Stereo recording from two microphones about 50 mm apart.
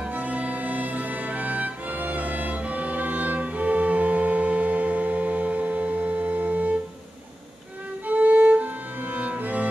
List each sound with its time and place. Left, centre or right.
0.1 s music: right
8.1 s music: right
9.1 s cello: right